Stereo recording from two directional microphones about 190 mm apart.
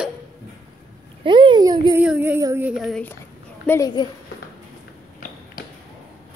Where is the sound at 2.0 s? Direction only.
10° right (ahead or behind).